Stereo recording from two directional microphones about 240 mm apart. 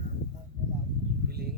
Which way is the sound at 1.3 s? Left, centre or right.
Right.